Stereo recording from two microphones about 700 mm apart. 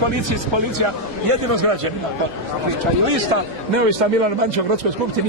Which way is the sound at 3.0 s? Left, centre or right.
Right.